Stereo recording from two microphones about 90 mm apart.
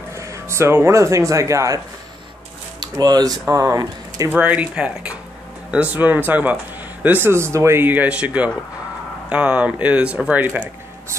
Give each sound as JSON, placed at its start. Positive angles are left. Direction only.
{"t": 0.1, "sound": "speech", "side_deg": -35}
{"t": 2.8, "sound": "speech", "side_deg": -50}
{"t": 3.4, "sound": "speech", "side_deg": -35}
{"t": 4.3, "sound": "speech", "side_deg": -15}